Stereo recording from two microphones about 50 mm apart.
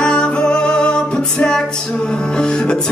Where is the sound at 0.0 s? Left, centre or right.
Centre.